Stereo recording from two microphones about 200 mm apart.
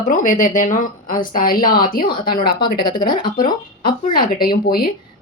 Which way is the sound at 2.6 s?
20° left (ahead or behind).